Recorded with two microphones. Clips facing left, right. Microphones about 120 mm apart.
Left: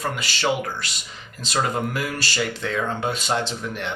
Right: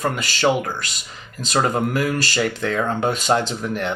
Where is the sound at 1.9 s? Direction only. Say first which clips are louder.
Right 6 dB; 45° right (ahead or behind).